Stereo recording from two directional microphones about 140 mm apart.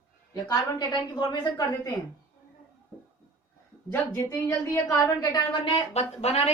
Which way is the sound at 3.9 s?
10° left (ahead or behind).